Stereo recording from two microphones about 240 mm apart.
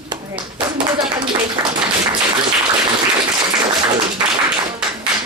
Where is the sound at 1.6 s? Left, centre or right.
Centre.